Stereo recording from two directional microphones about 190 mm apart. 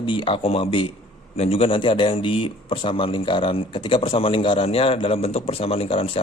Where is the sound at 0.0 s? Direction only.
25° left (ahead or behind).